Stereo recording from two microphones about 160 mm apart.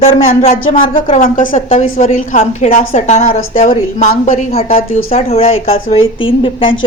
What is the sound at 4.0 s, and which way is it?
A woman's voice, 50° left (ahead or behind).